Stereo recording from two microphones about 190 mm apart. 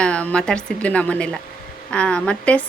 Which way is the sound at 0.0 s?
5° left (ahead or behind).